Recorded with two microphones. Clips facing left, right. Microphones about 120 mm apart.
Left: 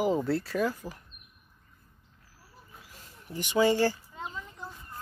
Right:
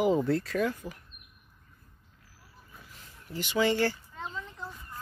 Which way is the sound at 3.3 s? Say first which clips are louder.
Left 3 dB; 15° left (ahead or behind).